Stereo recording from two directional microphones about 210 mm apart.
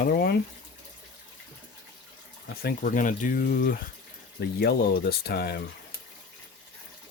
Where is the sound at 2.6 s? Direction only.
40° left (ahead or behind).